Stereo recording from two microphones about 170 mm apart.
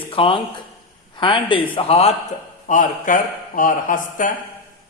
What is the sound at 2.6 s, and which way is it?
A man's voice, 50° left (ahead or behind).